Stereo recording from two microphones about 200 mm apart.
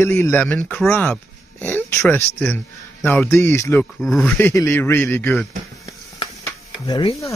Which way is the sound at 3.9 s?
Centre (ahead or behind).